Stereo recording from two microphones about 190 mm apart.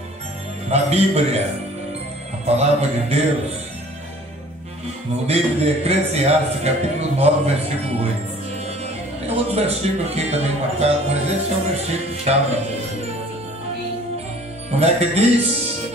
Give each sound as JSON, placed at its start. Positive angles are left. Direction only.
{"t": 0.7, "sound": "speech", "side_deg": -35}
{"t": 2.4, "sound": "speech", "side_deg": -35}
{"t": 5.2, "sound": "speech", "side_deg": -35}
{"t": 9.3, "sound": "speech", "side_deg": -35}
{"t": 14.7, "sound": "speech", "side_deg": -35}